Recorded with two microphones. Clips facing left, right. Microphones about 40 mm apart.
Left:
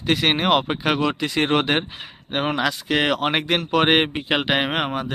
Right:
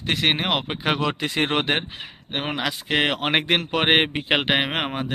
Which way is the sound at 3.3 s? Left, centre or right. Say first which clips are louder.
Right 1 dB; right.